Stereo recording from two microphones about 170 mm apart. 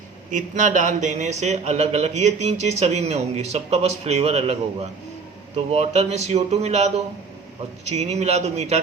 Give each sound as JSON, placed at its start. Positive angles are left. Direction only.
{"t": 0.3, "sound": "speech", "side_deg": -50}